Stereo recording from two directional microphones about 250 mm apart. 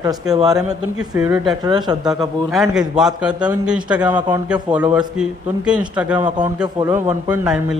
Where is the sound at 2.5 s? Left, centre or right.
Centre.